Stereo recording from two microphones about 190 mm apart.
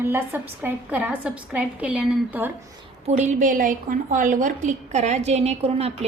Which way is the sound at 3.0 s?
35° right (ahead or behind).